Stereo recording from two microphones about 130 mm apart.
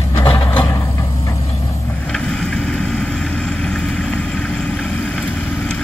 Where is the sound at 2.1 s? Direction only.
5° left (ahead or behind).